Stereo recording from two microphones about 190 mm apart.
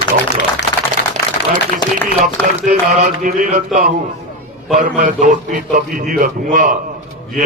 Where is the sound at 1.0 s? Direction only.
60° left (ahead or behind).